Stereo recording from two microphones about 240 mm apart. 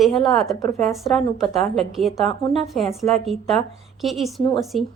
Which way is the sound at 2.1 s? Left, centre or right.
Centre.